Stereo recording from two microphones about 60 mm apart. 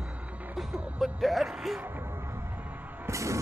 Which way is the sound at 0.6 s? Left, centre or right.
Centre.